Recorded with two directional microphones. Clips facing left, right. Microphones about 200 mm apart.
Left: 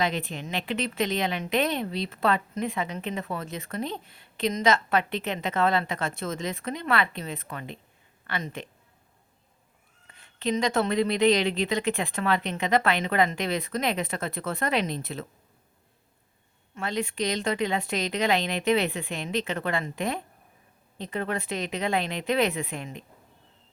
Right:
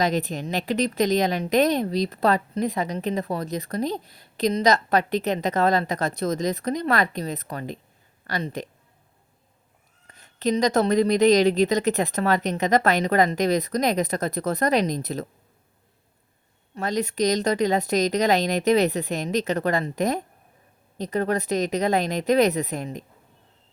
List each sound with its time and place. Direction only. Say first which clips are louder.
0.0 s a woman's voice: right 5 dB; 40° right (ahead or behind)
10.1 s a woman's voice: right 4 dB; 40° right (ahead or behind)
16.7 s a woman's voice: right 4 dB; 40° right (ahead or behind)